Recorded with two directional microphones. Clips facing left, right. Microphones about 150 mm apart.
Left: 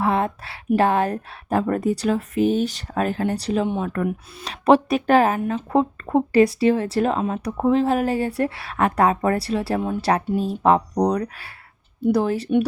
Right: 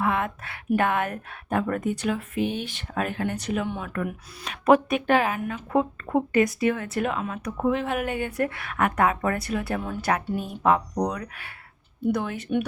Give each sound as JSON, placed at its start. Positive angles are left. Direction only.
{"t": 0.0, "sound": "speech", "side_deg": 30}